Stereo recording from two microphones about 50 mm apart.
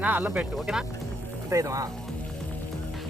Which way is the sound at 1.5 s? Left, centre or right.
Right.